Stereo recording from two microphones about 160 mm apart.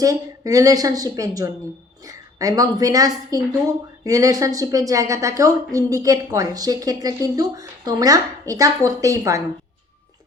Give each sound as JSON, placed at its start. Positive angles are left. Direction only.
{"t": 0.0, "sound": "a woman's voice", "side_deg": -20}